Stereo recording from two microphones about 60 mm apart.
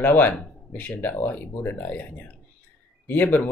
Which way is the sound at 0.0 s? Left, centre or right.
Left.